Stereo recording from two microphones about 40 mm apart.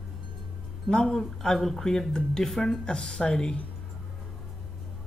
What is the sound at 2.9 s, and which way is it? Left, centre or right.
Speech, centre.